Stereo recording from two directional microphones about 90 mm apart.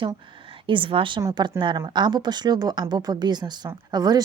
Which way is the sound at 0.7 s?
75° right (ahead or behind).